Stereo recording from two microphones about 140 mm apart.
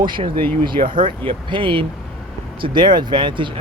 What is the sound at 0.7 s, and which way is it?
Speech, 35° right (ahead or behind).